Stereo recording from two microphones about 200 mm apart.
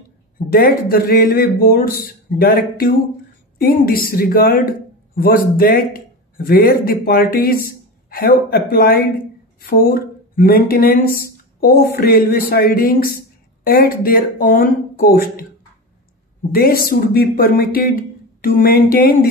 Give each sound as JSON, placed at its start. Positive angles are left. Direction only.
{"t": 0.5, "sound": "a man's voice", "side_deg": 45}
{"t": 16.5, "sound": "speech", "side_deg": 50}